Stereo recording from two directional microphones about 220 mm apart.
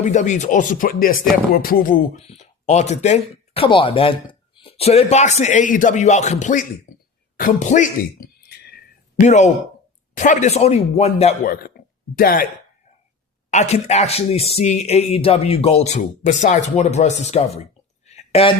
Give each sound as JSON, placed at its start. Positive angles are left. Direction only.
{"t": 0.0, "sound": "speech", "side_deg": 35}
{"t": 7.3, "sound": "a sound", "side_deg": 35}
{"t": 9.2, "sound": "speech", "side_deg": 30}
{"t": 11.8, "sound": "a sound", "side_deg": 45}
{"t": 12.1, "sound": "speech", "side_deg": 40}
{"t": 13.5, "sound": "speech", "side_deg": 30}